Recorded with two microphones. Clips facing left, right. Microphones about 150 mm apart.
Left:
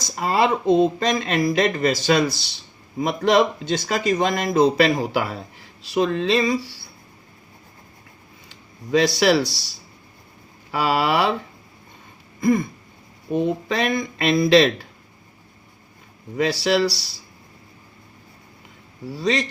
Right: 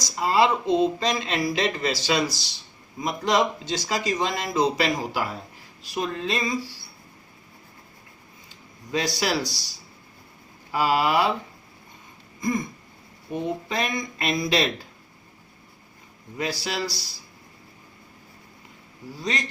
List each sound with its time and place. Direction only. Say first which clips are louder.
0.0 s a man's voice: left 1 dB; 55° left (ahead or behind)
5.8 s speech: left 8 dB; 80° left
8.4 s speech: left 9 dB; 70° left (ahead or behind)
13.3 s speech: left 6 dB; 70° left (ahead or behind)
16.4 s speech: left 9 dB; 70° left (ahead or behind)
19.0 s speech: left 7 dB; 75° left (ahead or behind)